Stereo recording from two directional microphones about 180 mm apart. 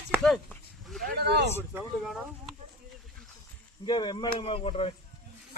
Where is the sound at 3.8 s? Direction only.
25° left (ahead or behind).